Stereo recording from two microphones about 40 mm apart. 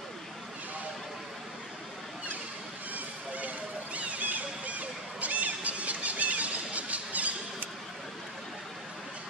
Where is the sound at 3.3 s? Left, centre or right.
Right.